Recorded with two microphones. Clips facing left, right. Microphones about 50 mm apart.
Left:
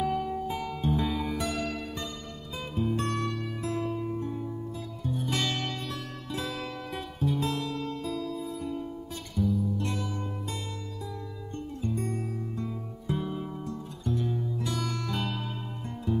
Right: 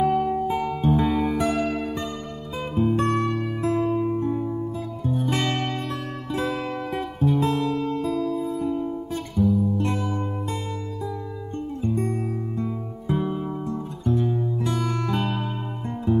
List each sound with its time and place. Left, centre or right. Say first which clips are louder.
0.0 s music: right 8 dB; right
11.8 s music: right 7 dB; right